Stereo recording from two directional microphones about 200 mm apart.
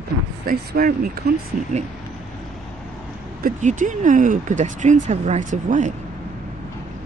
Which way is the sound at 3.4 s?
40° right (ahead or behind).